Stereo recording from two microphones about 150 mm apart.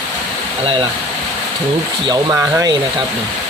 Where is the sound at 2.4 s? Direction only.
20° right (ahead or behind).